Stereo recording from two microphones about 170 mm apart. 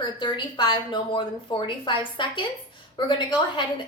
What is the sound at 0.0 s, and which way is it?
A woman's voice, 25° left (ahead or behind).